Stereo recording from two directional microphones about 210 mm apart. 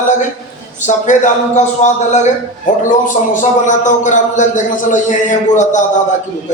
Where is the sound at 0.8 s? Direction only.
35° left (ahead or behind).